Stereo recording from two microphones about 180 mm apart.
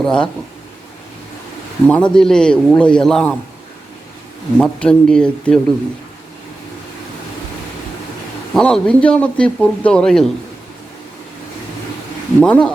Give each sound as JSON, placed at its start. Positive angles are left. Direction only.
{"t": 0.0, "sound": "a man's voice", "side_deg": 5}
{"t": 1.9, "sound": "a man's voice", "side_deg": 5}
{"t": 4.5, "sound": "a man's voice", "side_deg": 5}
{"t": 8.5, "sound": "a man's voice", "side_deg": 5}
{"t": 12.4, "sound": "speech", "side_deg": 5}